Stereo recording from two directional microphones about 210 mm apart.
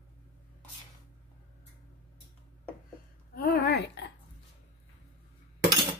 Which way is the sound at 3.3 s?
50° left (ahead or behind).